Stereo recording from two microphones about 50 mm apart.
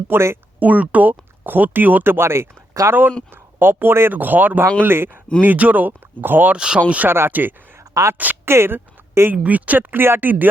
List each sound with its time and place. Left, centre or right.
0.1 s speech: right
0.6 s speech: right
2.1 s speech: right
3.1 s speech: centre
3.3 s speech: right
4.1 s speech: right
5.4 s speech: right
6.5 s speech: centre
7.3 s speech: right
7.8 s a sound: right
8.4 s a woman's voice: right
9.3 s speech: right